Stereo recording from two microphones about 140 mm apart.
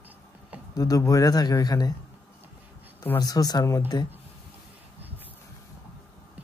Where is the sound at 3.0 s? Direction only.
20° left (ahead or behind).